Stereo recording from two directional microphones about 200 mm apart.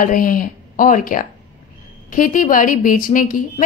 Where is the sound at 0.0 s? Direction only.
45° left (ahead or behind).